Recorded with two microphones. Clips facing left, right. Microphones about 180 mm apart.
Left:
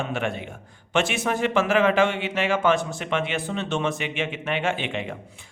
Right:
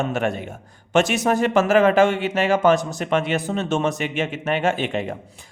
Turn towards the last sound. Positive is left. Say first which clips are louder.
# right 5 dB
turn(degrees=-40)  # may be behind; listen again after turning